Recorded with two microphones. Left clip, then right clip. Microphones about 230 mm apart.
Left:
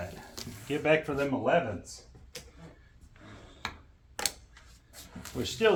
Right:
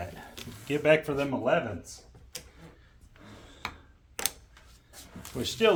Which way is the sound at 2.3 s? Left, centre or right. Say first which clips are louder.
Right 2 dB; right.